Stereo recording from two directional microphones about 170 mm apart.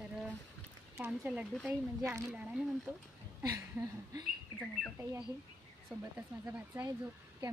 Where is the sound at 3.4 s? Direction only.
20° right (ahead or behind).